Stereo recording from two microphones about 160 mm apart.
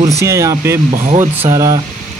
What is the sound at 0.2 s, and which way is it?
Speech, 20° right (ahead or behind).